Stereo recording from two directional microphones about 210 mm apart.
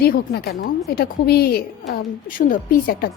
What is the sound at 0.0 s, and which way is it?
A woman's voice, 45° left (ahead or behind).